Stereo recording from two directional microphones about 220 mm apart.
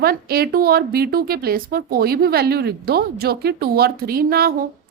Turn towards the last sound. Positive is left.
turn(degrees=-45)  # may be behind; listen again after turning